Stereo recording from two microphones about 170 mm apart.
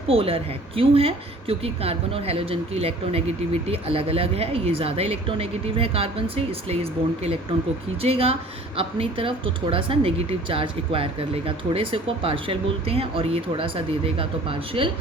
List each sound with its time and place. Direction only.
0.1 s a woman's voice: 35° right (ahead or behind)
8.0 s a woman's voice: 35° right (ahead or behind)